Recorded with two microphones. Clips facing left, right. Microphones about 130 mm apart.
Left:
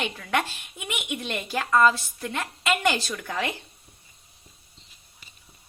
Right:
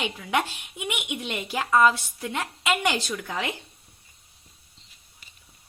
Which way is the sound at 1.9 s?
Centre (ahead or behind).